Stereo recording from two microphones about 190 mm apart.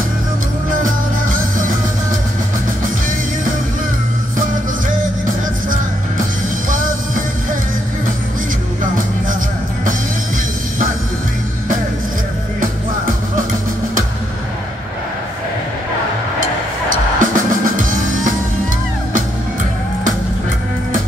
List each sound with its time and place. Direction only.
6.7 s music: 45° right (ahead or behind)
17.2 s music: 45° right (ahead or behind)